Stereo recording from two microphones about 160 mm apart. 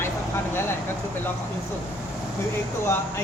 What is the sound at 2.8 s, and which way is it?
Speech, 15° left (ahead or behind).